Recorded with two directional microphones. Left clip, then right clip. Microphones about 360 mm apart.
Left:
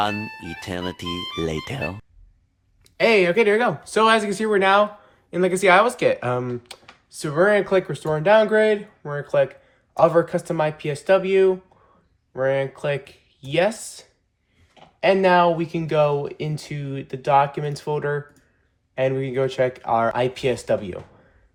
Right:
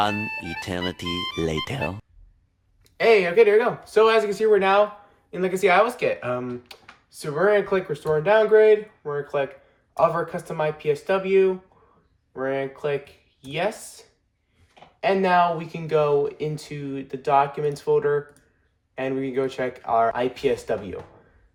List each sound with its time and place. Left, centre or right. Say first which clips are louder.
0.0 s speech: right 1 dB; centre
2.8 s speech: left 1 dB; left